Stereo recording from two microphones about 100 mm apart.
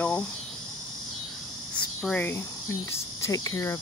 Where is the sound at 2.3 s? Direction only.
30° left (ahead or behind).